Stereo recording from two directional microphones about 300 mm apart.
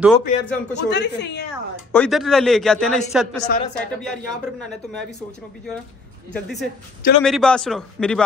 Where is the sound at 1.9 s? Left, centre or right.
Centre.